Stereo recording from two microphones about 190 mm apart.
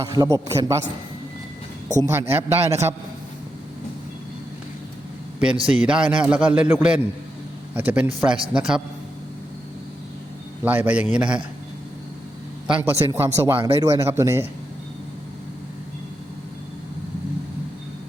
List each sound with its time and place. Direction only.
0.0 s a man's voice: 20° right (ahead or behind)
2.0 s a man's voice: 15° right (ahead or behind)
5.6 s a man's voice: 5° right (ahead or behind)
10.6 s a man's voice: 10° right (ahead or behind)
12.6 s a man's voice: 5° right (ahead or behind)
12.9 s a man's voice: 15° right (ahead or behind)